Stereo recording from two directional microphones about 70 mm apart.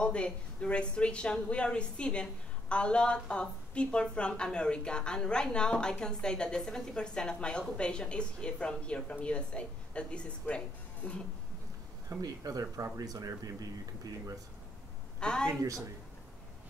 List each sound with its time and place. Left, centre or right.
0.0 s a woman's voice: centre
12.2 s speech: right
15.1 s a woman's voice: centre